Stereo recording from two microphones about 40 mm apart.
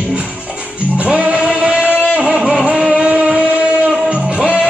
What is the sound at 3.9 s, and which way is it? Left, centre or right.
Music, right.